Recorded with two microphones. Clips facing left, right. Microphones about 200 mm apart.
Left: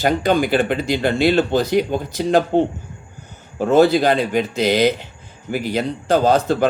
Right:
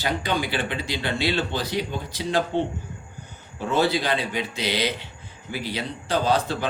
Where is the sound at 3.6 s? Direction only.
45° left (ahead or behind).